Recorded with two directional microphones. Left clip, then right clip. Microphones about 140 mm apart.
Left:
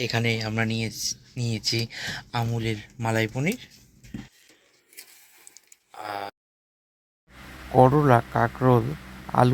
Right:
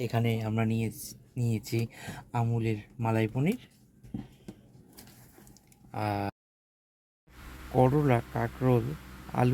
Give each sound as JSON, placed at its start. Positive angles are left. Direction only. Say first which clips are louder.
{"t": 0.0, "sound": "speech", "louder": "left 6 dB", "side_deg": -5}
{"t": 6.1, "sound": "speech", "louder": "left 1 dB", "side_deg": -10}
{"t": 7.8, "sound": "speech", "louder": "left 8 dB", "side_deg": 25}